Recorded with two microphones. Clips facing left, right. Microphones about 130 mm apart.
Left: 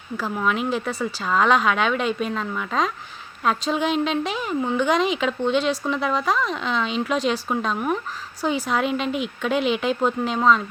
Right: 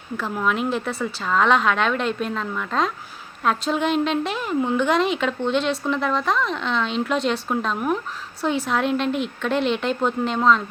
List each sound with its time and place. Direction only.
0.2 s a woman's voice: centre (ahead or behind)